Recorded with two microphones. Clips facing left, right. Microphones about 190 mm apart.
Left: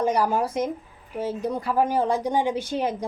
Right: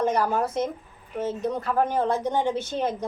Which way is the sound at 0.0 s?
10° left (ahead or behind).